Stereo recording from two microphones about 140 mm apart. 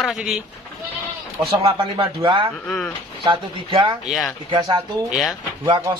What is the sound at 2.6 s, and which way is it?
Speech, 5° left (ahead or behind).